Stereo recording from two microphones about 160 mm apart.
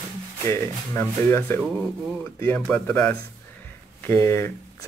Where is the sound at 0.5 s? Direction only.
15° left (ahead or behind).